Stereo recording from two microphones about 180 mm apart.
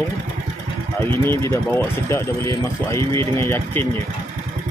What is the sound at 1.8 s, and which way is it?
Speech, 15° left (ahead or behind).